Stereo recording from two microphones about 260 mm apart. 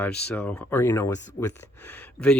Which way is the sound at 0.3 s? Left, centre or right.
Centre.